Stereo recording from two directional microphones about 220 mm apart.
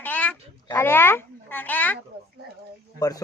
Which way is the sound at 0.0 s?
5° left (ahead or behind).